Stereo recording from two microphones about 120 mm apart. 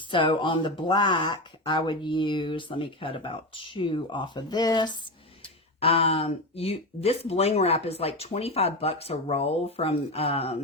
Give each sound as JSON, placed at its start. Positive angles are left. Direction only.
{"t": 0.1, "sound": "speech", "side_deg": 40}
{"t": 5.8, "sound": "speech", "side_deg": 60}